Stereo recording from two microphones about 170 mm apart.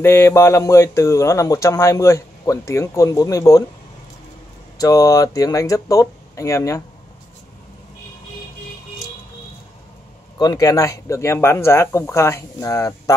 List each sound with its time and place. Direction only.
0.0 s speech: 15° left (ahead or behind)
4.7 s speech: 20° left (ahead or behind)
10.4 s speech: 20° left (ahead or behind)